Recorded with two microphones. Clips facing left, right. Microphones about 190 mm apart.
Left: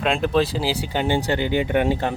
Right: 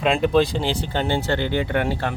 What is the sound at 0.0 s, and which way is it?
Speech, centre (ahead or behind).